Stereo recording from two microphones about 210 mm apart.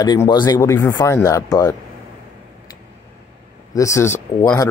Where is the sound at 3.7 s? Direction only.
15° left (ahead or behind).